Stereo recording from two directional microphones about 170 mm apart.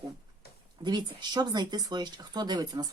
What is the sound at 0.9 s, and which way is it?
Speech, 25° right (ahead or behind).